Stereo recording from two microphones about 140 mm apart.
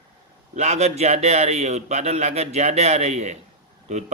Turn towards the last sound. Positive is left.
turn(degrees=-55)  # may be behind; listen again after turning